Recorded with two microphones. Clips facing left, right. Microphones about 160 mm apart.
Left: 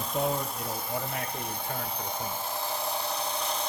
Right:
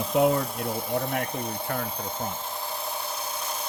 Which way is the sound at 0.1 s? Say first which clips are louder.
Right 8 dB; 90° right.